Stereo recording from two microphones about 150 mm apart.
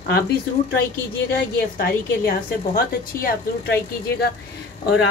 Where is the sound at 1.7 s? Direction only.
80° left.